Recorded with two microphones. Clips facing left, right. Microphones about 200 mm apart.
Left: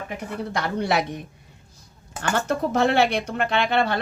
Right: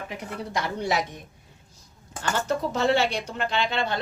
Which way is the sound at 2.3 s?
60° left (ahead or behind).